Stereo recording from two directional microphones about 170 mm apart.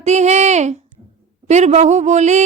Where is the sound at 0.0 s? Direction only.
40° right (ahead or behind).